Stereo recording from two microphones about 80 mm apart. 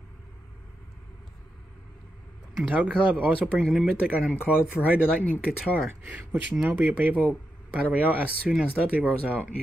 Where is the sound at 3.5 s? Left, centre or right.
Centre.